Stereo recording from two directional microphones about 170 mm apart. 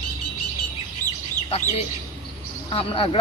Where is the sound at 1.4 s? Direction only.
35° left (ahead or behind).